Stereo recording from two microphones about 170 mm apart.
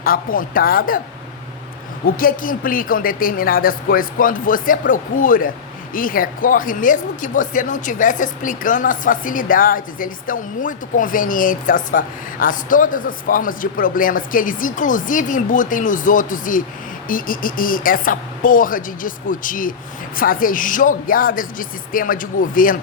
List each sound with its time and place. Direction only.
0.0 s speech: 55° left (ahead or behind)
2.0 s speech: 55° left (ahead or behind)